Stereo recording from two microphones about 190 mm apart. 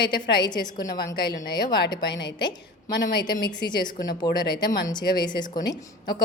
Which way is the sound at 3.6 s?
55° left (ahead or behind).